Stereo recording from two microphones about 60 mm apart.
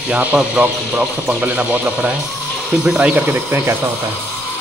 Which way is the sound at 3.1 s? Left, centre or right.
Right.